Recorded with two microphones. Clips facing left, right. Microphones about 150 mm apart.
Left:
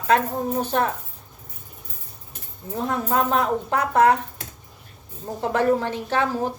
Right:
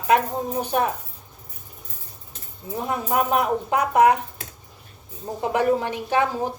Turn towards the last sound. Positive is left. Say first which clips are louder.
# right 1 dB
turn(degrees=-15)  # may be behind; listen again after turning